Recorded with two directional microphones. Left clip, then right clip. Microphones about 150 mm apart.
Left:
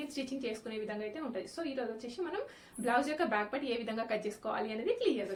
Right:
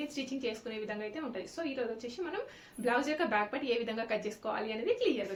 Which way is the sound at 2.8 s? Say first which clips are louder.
Even; centre (ahead or behind).